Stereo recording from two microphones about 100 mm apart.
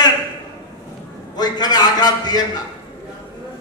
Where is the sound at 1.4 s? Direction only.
45° left (ahead or behind).